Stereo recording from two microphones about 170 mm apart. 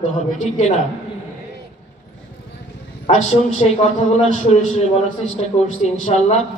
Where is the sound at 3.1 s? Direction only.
40° left (ahead or behind).